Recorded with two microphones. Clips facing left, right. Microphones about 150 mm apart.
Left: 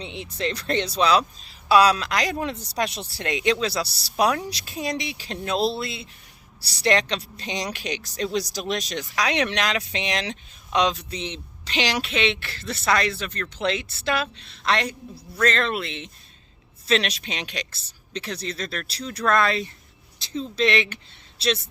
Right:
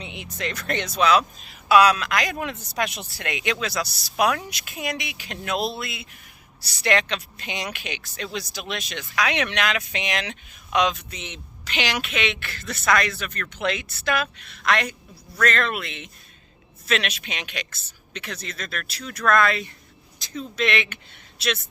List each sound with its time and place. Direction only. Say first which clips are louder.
0.0 s speech: left 3 dB; 30° left (ahead or behind)